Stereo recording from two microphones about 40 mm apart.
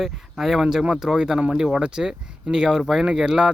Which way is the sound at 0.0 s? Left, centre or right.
Centre.